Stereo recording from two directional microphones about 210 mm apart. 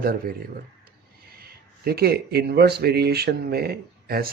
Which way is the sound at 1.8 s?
50° right (ahead or behind).